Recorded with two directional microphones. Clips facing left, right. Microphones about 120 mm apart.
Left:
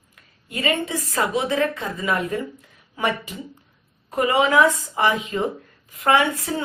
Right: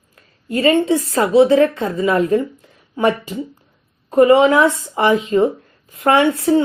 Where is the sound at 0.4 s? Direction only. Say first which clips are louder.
Right 10 dB; 35° right (ahead or behind).